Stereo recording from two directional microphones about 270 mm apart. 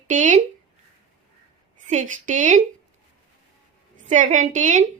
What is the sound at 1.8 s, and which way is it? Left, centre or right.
Speech, right.